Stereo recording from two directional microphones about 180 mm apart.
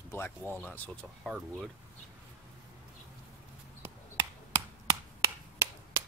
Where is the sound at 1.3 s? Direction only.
5° right (ahead or behind).